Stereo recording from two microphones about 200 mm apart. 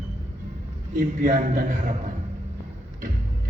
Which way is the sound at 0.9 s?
40° right (ahead or behind).